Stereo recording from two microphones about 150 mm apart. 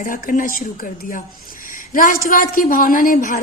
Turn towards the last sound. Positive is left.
turn(degrees=65)  # may be behind; listen again after turning